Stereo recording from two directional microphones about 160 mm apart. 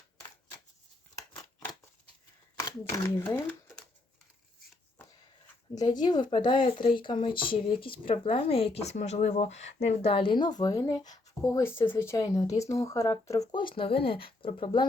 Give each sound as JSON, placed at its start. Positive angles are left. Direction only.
{"t": 2.6, "sound": "speech", "side_deg": 20}
{"t": 5.7, "sound": "speech", "side_deg": 25}
{"t": 13.7, "sound": "speech", "side_deg": 35}